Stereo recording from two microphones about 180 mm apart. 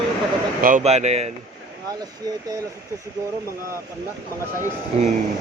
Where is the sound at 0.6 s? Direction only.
45° right (ahead or behind).